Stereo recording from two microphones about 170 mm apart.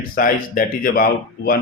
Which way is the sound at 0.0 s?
55° left (ahead or behind).